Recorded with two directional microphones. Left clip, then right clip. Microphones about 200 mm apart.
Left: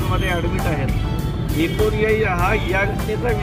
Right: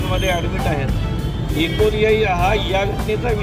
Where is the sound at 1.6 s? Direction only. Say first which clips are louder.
Right 3 dB; 35° left (ahead or behind).